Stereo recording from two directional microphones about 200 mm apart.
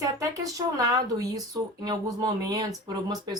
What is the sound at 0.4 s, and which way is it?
Speech, 15° right (ahead or behind).